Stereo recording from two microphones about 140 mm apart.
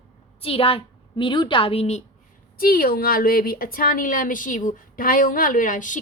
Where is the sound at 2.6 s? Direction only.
90° left.